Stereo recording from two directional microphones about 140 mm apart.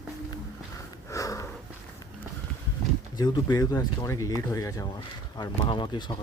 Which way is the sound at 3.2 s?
25° left (ahead or behind).